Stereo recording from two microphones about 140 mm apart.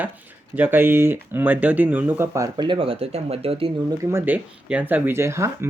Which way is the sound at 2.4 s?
35° right (ahead or behind).